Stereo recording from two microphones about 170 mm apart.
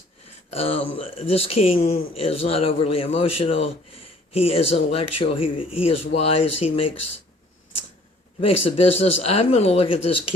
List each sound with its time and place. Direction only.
0.5 s speech: 35° left (ahead or behind)
8.4 s speech: 35° left (ahead or behind)